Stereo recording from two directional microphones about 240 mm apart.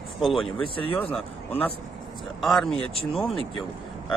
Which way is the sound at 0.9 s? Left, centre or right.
Centre.